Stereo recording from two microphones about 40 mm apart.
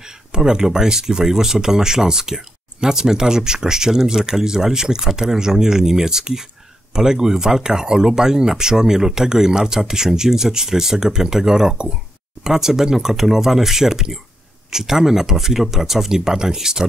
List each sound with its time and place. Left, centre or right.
0.3 s speech: centre